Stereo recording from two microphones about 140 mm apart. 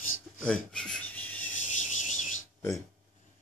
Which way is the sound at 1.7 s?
60° left (ahead or behind).